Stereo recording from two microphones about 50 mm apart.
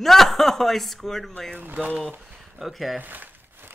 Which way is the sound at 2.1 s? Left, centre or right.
Right.